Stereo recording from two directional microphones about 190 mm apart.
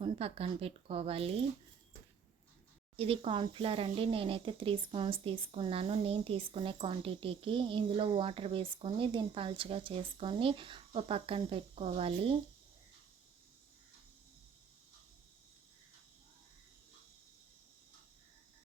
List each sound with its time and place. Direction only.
0.0 s speech: 30° right (ahead or behind)
2.9 s speech: 30° right (ahead or behind)